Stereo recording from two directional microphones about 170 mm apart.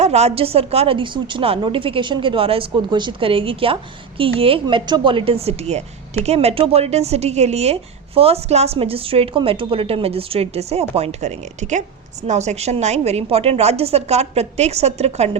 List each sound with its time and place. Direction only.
0.0 s a woman's voice: 40° right (ahead or behind)